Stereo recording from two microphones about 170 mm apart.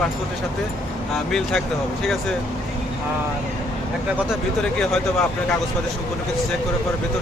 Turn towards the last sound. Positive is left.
turn(degrees=5)  # may be behind; listen again after turning